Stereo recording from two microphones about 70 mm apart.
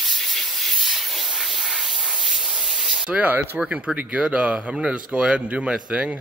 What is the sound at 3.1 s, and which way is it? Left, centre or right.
Speech, right.